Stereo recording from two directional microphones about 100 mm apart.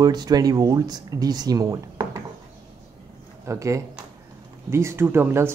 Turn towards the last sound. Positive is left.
turn(degrees=-25)  # may be behind; listen again after turning